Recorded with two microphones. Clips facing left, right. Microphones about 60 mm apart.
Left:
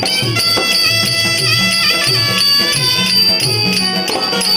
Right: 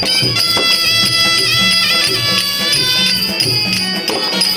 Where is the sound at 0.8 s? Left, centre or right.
Left.